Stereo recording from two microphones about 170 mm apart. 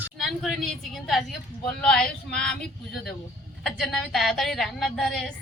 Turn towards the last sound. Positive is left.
turn(degrees=0)  # may be behind; listen again after turning